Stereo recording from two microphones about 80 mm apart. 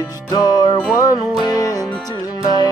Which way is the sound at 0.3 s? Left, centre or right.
Left.